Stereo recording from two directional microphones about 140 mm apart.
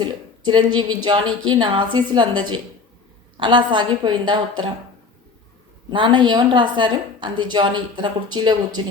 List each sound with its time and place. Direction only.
0.0 s a woman's voice: 30° right (ahead or behind)
5.9 s a woman's voice: 35° right (ahead or behind)